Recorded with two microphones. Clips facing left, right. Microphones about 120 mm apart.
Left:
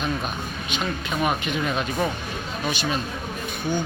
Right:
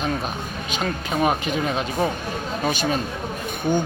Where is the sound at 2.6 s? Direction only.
45° right (ahead or behind).